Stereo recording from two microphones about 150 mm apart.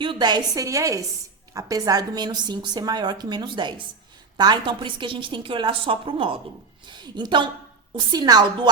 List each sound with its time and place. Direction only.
0.0 s a woman's voice: 30° right (ahead or behind)